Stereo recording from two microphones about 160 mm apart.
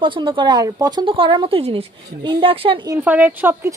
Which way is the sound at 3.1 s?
10° right (ahead or behind).